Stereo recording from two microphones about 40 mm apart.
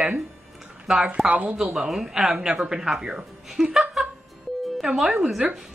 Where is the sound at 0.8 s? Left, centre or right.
Centre.